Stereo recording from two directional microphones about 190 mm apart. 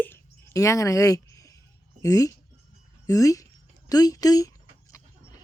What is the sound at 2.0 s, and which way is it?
Speech, 20° left (ahead or behind).